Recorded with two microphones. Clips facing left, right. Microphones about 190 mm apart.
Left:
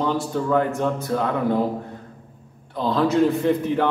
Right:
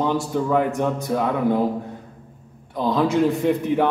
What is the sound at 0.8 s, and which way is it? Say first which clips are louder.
Speech: right 1 dB; 15° right (ahead or behind).